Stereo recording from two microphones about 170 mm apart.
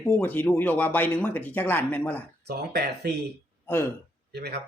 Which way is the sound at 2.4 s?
70° right (ahead or behind).